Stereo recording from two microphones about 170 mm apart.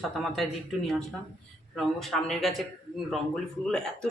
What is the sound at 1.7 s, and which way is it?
A man's voice, centre (ahead or behind).